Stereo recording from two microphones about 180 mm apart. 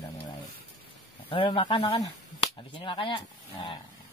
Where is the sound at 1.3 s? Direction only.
25° left (ahead or behind).